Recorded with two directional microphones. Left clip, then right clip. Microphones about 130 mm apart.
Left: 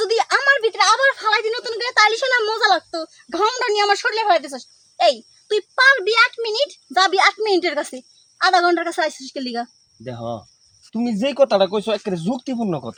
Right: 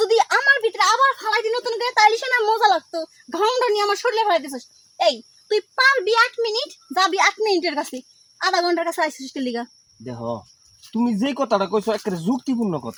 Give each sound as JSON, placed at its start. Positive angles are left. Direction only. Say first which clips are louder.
{"t": 0.0, "sound": "a sound", "louder": "even", "side_deg": 20}
{"t": 8.4, "sound": "speech", "louder": "left 4 dB", "side_deg": 25}
{"t": 10.0, "sound": "speech", "louder": "even", "side_deg": 35}
{"t": 10.9, "sound": "speech", "louder": "left 4 dB", "side_deg": 25}